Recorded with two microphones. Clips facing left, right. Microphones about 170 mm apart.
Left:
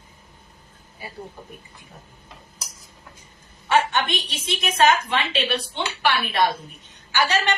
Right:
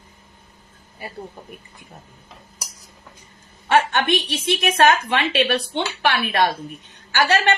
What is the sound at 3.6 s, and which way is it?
A woman's voice, 50° right (ahead or behind).